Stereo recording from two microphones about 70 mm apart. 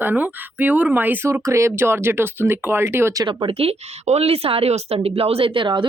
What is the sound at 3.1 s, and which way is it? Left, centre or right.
Speech, right.